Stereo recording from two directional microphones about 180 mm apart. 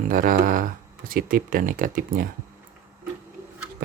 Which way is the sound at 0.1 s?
50° right (ahead or behind).